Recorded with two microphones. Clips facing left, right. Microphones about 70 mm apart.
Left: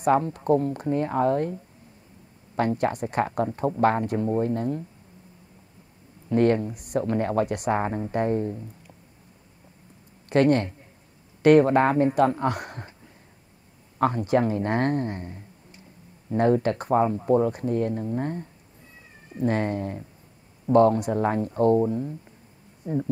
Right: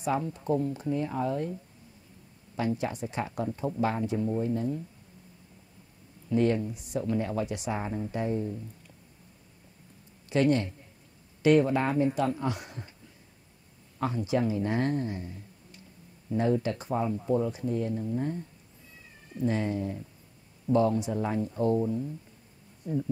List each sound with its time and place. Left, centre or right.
0.0 s speech: left
6.2 s speech: left
10.3 s speech: left
13.9 s speech: left
22.8 s speech: left